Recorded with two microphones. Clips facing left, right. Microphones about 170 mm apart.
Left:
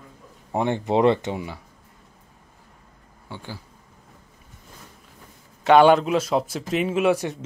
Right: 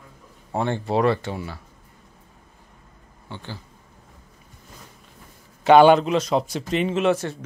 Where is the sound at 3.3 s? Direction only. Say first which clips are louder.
Even; 10° left (ahead or behind).